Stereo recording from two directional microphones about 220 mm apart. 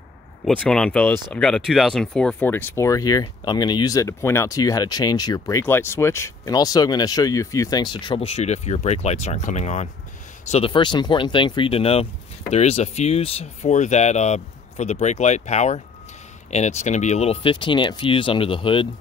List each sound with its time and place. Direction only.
0.5 s speech: 5° left (ahead or behind); by 18.9 s 25° left (ahead or behind)